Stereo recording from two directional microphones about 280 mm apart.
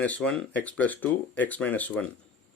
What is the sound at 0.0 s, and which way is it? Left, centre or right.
Speech, centre.